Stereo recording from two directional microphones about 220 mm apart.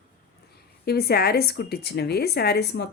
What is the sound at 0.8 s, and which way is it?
Speech, 45° left (ahead or behind).